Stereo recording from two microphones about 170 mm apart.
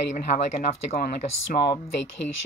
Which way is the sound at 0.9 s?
65° left (ahead or behind).